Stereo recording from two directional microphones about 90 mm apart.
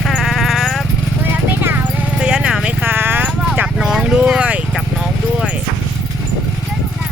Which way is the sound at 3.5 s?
15° right (ahead or behind).